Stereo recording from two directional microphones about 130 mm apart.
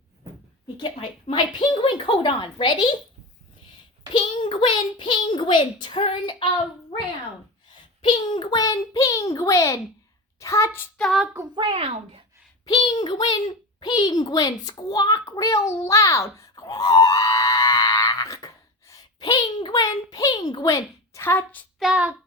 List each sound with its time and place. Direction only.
0.8 s a child's voice: 35° left (ahead or behind)
4.1 s a child's voice: 35° left (ahead or behind)
8.1 s a child's voice: 35° left (ahead or behind); by 10.8 s 20° left (ahead or behind)
10.9 s child singing: 5° left (ahead or behind)
11.5 s a child's voice: 45° right (ahead or behind)
12.6 s a child's voice: 35° left (ahead or behind); by 21.7 s 10° left (ahead or behind)
21.8 s child singing: 10° right (ahead or behind)